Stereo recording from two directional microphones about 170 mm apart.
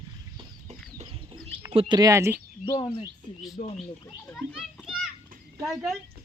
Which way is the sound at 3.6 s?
45° left (ahead or behind).